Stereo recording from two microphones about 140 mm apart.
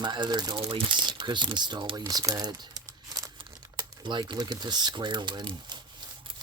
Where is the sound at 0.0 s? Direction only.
30° right (ahead or behind).